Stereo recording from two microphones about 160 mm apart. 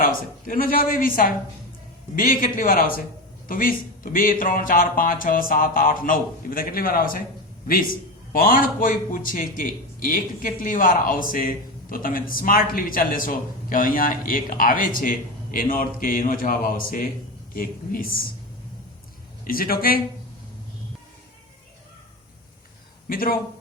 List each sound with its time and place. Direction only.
0.0 s a man's voice: 60° left (ahead or behind)
8.3 s a man's voice: 60° left (ahead or behind)
19.5 s a man's voice: 65° left (ahead or behind)
23.0 s a man's voice: 60° left (ahead or behind)